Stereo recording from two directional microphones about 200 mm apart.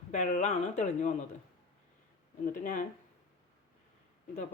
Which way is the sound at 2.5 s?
40° left (ahead or behind).